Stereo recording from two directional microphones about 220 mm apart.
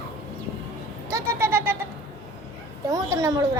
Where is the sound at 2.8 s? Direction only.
15° right (ahead or behind).